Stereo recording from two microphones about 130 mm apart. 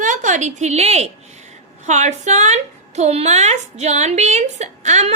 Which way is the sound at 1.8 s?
65° right (ahead or behind).